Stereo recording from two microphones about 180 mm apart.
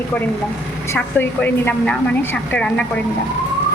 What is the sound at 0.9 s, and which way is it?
A woman's voice, 10° left (ahead or behind).